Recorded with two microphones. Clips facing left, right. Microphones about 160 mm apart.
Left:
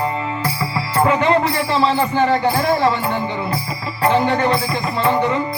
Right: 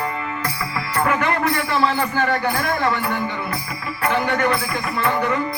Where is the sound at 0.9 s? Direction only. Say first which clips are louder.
Left 5 dB; 25° left (ahead or behind).